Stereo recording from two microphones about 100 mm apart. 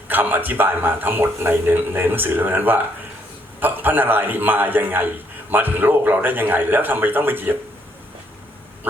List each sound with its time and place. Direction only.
0.1 s speech: 20° right (ahead or behind)